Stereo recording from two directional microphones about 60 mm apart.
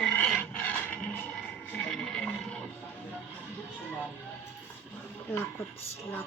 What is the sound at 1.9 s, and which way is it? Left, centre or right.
Music, centre.